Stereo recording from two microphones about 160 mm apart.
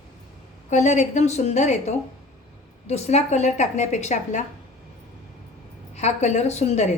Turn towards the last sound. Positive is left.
turn(degrees=45)  # may be behind; listen again after turning